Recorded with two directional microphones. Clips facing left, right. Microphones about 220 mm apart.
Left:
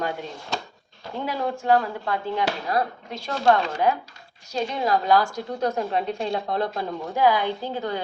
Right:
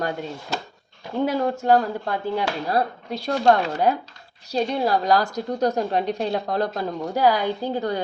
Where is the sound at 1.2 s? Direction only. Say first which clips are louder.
Right 5 dB; 40° right (ahead or behind).